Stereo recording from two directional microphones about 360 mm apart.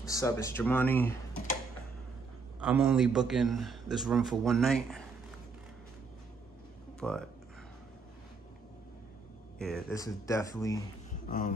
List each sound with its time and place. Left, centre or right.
0.0 s a man's voice: centre
2.6 s a man's voice: centre
7.0 s speech: centre
9.6 s speech: centre
11.2 s a sound: left